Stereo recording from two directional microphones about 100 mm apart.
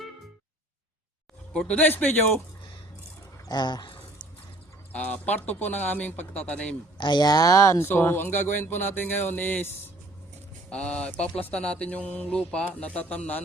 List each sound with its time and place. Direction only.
1.5 s speech: 15° left (ahead or behind)
3.5 s speech: 45° left (ahead or behind)
4.9 s speech: 15° left (ahead or behind)
7.0 s speech: 45° left (ahead or behind); by 13.4 s 15° left (ahead or behind)